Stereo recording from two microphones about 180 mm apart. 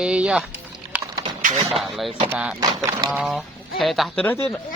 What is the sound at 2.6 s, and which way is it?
Speech, 20° right (ahead or behind).